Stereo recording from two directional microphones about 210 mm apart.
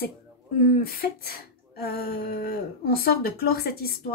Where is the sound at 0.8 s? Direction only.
45° left (ahead or behind).